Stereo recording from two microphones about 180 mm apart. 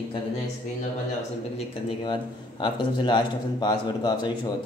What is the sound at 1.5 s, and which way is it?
Speech, 25° left (ahead or behind).